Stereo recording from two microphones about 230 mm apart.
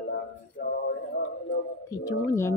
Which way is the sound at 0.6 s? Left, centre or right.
Left.